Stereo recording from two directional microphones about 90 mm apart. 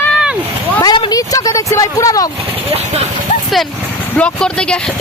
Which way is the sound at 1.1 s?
40° left (ahead or behind).